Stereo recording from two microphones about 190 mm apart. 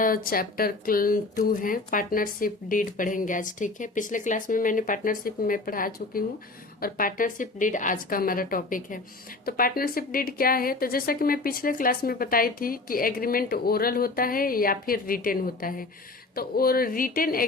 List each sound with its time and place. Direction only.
0.0 s a woman's voice: 50° left (ahead or behind)